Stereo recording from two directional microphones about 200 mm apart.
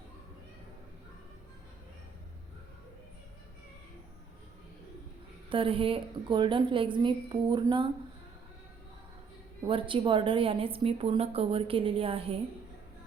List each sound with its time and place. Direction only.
5.5 s a woman's voice: 25° right (ahead or behind)
9.6 s a woman's voice: 25° right (ahead or behind)